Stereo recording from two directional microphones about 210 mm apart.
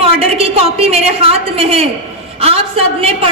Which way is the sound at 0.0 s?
30° right (ahead or behind).